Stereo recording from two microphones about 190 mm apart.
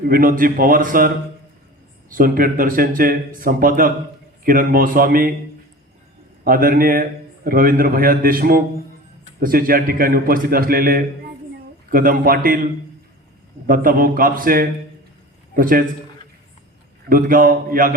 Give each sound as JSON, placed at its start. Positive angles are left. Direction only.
{"t": 0.1, "sound": "a man's voice", "side_deg": -45}
{"t": 6.4, "sound": "a man's voice", "side_deg": -50}
{"t": 13.7, "sound": "a man's voice", "side_deg": -50}
{"t": 17.1, "sound": "a man's voice", "side_deg": -45}